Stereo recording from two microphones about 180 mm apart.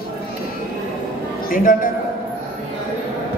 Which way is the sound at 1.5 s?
50° left (ahead or behind).